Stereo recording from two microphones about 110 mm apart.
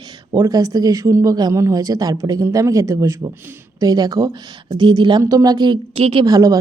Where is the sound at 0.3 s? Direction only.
35° right (ahead or behind).